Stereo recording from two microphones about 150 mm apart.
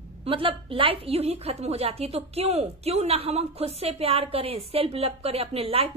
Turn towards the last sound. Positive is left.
turn(degrees=-40)  # may be behind; listen again after turning